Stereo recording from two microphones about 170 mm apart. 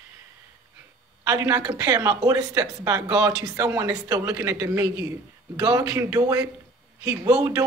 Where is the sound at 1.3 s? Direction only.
20° right (ahead or behind).